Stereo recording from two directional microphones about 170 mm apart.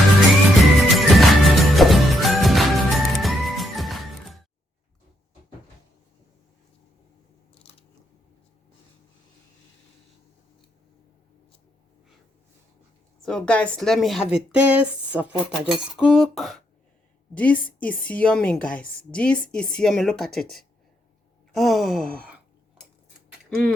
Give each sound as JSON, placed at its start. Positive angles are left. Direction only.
{"t": 0.5, "sound": "music", "side_deg": 0}
{"t": 13.2, "sound": "cutlery", "side_deg": 5}
{"t": 17.3, "sound": "a woman's voice", "side_deg": 10}
{"t": 18.8, "sound": "cutlery", "side_deg": 5}
{"t": 21.5, "sound": "cutlery", "side_deg": 0}
{"t": 22.0, "sound": "sigh", "side_deg": -60}